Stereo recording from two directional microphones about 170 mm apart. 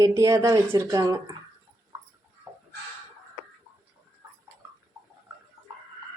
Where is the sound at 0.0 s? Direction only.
20° right (ahead or behind).